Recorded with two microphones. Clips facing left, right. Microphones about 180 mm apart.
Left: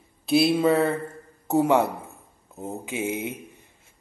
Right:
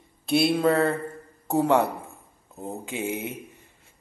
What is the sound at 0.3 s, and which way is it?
Speech, centre (ahead or behind).